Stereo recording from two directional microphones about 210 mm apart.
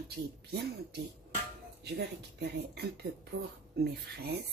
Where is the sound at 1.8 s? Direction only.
50° right (ahead or behind).